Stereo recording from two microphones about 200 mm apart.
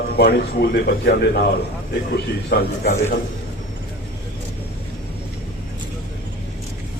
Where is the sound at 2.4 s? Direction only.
50° left (ahead or behind).